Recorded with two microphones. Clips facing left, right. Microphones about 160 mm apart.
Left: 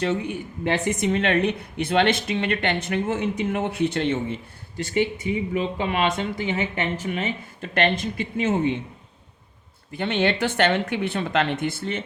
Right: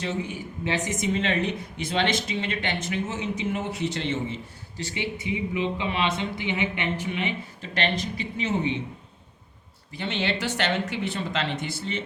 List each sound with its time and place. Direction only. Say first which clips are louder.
0.0 s speech: left 5 dB; 60° left (ahead or behind)
9.9 s speech: left 5 dB; 55° left (ahead or behind)